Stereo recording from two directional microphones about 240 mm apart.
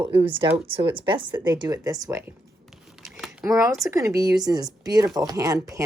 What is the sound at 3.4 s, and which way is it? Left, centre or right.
Speech, centre.